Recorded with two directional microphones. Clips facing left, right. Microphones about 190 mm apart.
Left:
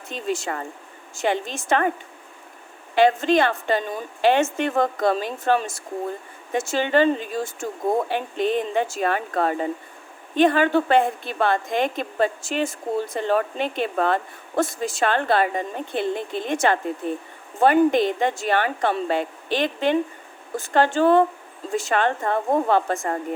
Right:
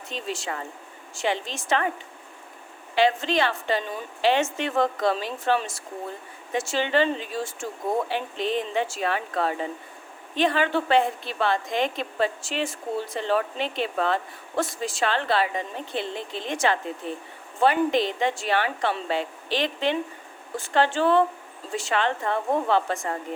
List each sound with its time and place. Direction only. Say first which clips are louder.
0.1 s a woman's voice: left 5 dB; 50° left (ahead or behind)
2.9 s a woman's voice: left 5 dB; 50° left (ahead or behind)